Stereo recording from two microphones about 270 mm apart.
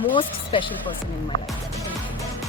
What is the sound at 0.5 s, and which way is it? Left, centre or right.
Speech, centre.